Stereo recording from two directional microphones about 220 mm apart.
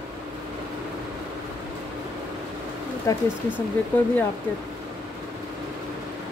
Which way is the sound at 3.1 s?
15° left (ahead or behind).